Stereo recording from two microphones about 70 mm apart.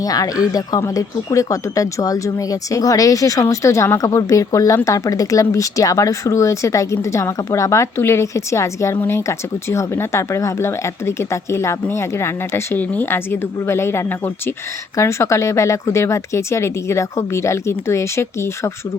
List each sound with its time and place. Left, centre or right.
0.0 s speech: left
12.7 s speech: left